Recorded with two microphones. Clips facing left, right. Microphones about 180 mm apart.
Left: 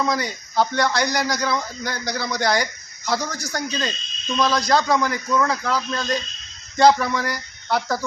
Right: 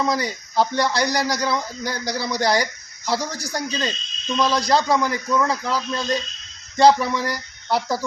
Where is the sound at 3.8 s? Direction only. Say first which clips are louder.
Right 1 dB; 5° right (ahead or behind).